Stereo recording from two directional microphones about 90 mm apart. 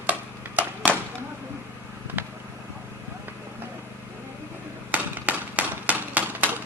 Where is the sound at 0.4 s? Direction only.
20° right (ahead or behind).